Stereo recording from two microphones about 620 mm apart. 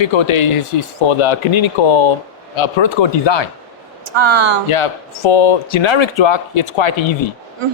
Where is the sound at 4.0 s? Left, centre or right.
Right.